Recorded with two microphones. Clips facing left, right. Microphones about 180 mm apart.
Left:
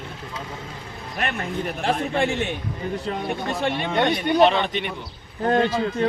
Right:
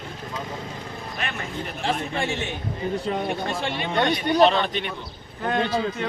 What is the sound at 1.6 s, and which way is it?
Speech, 55° left (ahead or behind).